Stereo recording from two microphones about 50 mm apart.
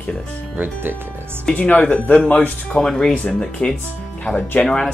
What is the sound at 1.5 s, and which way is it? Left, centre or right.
Speech, left.